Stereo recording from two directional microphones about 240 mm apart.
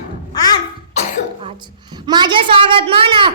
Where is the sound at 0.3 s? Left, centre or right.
Centre.